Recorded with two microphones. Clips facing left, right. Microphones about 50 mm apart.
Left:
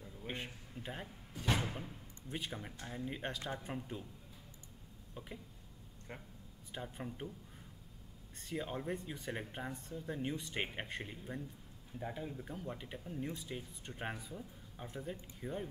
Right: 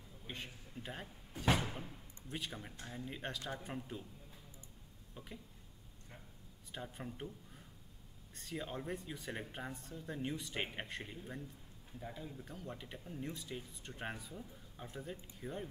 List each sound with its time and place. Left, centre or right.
0.3 s a sound: left
0.8 s speech: centre
6.7 s speech: centre
12.0 s speech: left; by 15.6 s centre